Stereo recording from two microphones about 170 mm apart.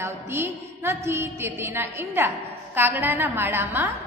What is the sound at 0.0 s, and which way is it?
A woman's voice, 15° right (ahead or behind).